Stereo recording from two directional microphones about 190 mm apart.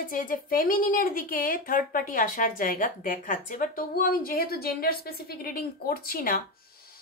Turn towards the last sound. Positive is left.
turn(degrees=50)  # may be behind; listen again after turning